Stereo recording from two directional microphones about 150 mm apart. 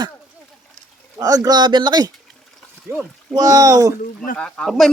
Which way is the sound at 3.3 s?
25° right (ahead or behind).